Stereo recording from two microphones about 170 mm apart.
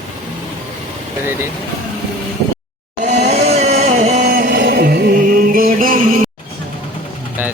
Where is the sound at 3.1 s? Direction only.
40° right (ahead or behind).